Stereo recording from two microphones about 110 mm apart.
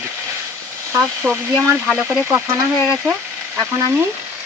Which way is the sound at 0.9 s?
25° right (ahead or behind).